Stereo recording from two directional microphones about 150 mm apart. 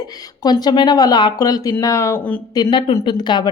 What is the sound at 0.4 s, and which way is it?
A woman's voice, 25° left (ahead or behind).